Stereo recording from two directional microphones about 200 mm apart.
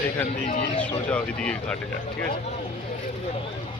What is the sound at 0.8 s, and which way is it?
Speech, 5° left (ahead or behind).